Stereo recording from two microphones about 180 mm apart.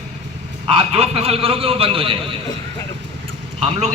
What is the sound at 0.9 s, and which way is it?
A man's voice, 35° right (ahead or behind).